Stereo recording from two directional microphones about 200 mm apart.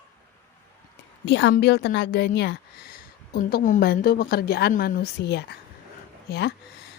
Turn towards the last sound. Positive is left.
turn(degrees=55)  # may be behind; listen again after turning